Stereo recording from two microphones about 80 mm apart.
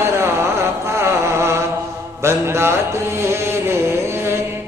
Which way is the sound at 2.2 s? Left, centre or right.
Right.